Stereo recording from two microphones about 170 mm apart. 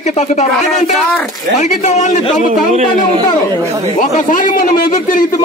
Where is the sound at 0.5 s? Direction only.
5° left (ahead or behind).